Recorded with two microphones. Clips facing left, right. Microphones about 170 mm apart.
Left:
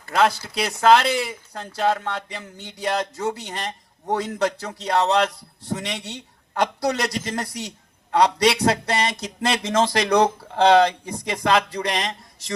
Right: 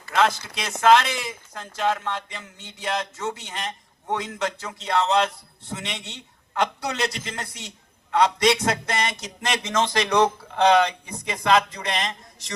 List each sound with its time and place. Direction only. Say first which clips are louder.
0.1 s speech: left 2 dB; 35° left (ahead or behind)